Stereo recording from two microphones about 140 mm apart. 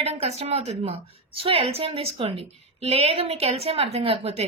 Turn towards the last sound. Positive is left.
turn(degrees=-45)  # may be behind; listen again after turning